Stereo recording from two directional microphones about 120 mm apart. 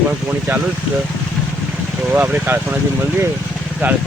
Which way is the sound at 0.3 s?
15° right (ahead or behind).